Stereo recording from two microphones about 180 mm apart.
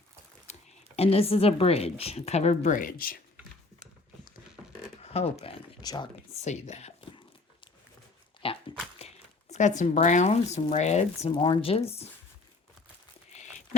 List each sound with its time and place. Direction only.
0.9 s a woman's voice: 35° left (ahead or behind); by 3.2 s 50° left (ahead or behind)
5.0 s speech: 35° left (ahead or behind)
5.8 s speech: 20° left (ahead or behind)
6.4 s speech: 40° left (ahead or behind)
8.4 s a sound: 30° left (ahead or behind)
9.0 s speech: 40° left (ahead or behind)
11.3 s a woman's voice: 25° left (ahead or behind)
13.3 s a sound: 35° left (ahead or behind)